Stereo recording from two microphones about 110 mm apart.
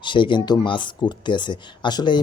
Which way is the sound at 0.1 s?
45° left (ahead or behind).